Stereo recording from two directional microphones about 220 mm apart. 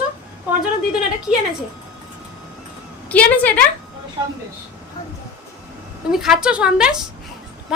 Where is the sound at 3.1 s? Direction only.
5° left (ahead or behind).